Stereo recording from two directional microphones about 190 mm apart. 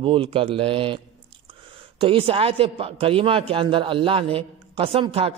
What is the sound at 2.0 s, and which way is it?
A man's voice, 30° right (ahead or behind).